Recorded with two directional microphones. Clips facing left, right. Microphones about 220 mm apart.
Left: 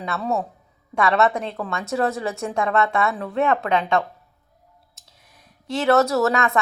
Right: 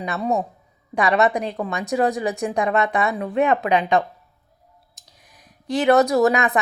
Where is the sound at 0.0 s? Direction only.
15° right (ahead or behind).